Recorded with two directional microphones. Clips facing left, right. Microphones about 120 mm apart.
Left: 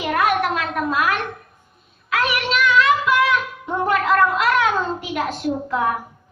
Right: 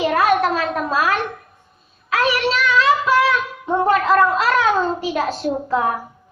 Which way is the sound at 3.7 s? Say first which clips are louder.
Right 3 dB; 30° right (ahead or behind).